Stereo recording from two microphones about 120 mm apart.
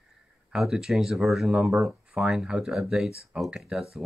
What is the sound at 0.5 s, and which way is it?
Speech, 5° right (ahead or behind).